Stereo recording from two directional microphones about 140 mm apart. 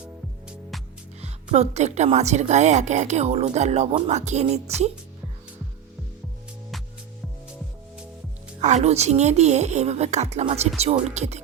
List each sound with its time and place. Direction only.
1.2 s a woman's voice: 55° right (ahead or behind)
8.6 s a woman's voice: 55° right (ahead or behind)